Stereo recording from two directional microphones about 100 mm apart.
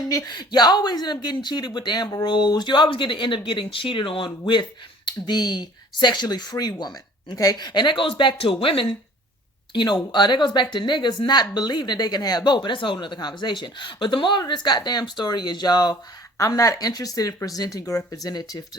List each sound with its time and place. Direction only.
0.3 s speech: 45° left (ahead or behind)